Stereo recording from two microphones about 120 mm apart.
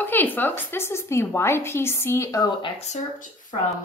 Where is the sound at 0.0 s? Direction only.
15° left (ahead or behind).